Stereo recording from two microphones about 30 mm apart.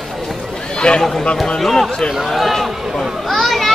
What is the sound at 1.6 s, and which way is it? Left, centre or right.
Speech, centre.